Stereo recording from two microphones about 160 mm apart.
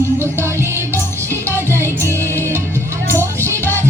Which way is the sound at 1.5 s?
15° right (ahead or behind).